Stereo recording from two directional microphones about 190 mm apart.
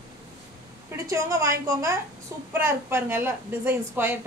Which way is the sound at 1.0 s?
15° right (ahead or behind).